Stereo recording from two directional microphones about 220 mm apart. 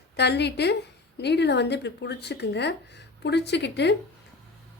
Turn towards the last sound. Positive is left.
turn(degrees=50)  # may be behind; listen again after turning